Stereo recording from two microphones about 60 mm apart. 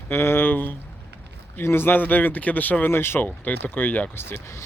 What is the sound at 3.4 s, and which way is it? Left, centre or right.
Speech, left.